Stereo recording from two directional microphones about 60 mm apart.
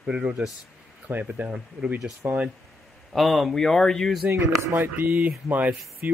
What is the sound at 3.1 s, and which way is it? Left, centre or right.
Speech, centre.